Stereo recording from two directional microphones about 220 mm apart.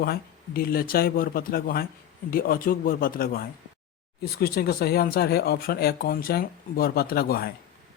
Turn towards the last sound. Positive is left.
turn(degrees=45)  # may be behind; listen again after turning